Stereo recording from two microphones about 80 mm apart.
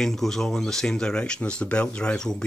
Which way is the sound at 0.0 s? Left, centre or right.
Centre.